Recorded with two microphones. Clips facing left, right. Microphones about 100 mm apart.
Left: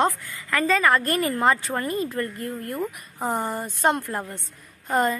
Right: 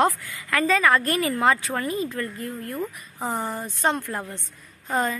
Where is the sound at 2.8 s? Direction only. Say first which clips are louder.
Left 1 dB; 5° left (ahead or behind).